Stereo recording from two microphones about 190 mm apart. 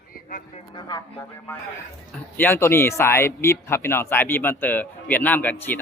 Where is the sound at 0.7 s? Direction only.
25° left (ahead or behind).